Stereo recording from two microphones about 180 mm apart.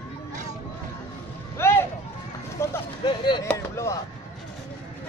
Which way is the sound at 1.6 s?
15° left (ahead or behind).